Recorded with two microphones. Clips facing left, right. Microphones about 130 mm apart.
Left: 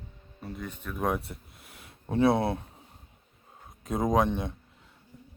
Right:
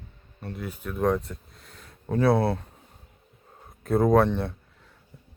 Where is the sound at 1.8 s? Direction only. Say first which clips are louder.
Right 1 dB; 25° left (ahead or behind).